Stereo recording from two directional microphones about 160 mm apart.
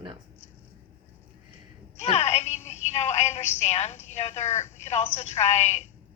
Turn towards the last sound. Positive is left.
turn(degrees=45)  # may be behind; listen again after turning